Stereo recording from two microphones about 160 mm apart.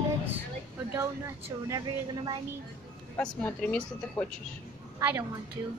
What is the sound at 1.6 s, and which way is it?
Speech, 25° right (ahead or behind).